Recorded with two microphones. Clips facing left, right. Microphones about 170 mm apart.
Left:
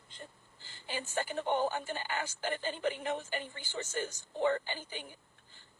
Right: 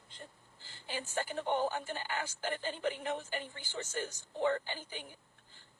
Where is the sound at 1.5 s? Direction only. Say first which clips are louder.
Left 1 dB; 25° left (ahead or behind).